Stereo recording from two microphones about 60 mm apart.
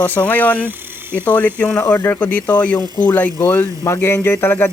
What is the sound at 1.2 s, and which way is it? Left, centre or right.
Speech, left.